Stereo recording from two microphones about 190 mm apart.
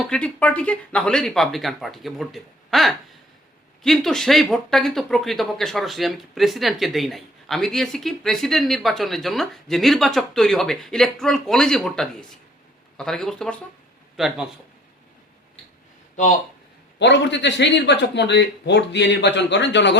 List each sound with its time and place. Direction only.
0.1 s speech: 5° left (ahead or behind)
17.0 s speech: 65° left (ahead or behind)